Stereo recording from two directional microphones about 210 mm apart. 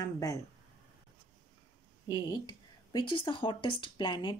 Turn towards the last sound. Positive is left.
turn(degrees=20)  # may be behind; listen again after turning